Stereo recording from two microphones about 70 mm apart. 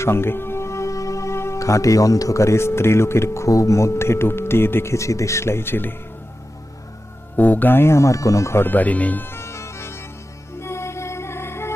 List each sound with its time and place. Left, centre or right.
0.0 s speech: left
7.3 s speech: left
8.6 s music: left